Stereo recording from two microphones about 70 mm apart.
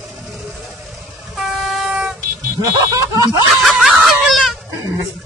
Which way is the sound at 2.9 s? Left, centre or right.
Right.